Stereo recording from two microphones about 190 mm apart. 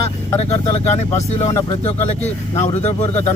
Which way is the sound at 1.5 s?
20° left (ahead or behind).